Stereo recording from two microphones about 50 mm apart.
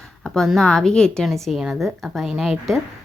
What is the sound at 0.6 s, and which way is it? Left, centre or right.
Speech, centre.